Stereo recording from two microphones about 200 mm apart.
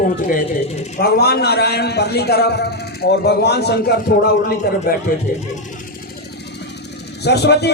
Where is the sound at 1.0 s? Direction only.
50° left (ahead or behind).